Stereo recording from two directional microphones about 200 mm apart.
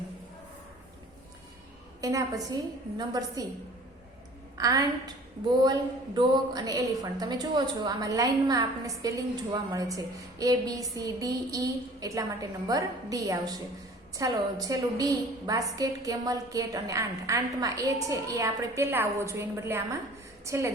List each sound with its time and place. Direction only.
2.0 s a woman's voice: 15° right (ahead or behind)
4.5 s a woman's voice: 15° right (ahead or behind)
6.1 s a woman's voice: 20° right (ahead or behind)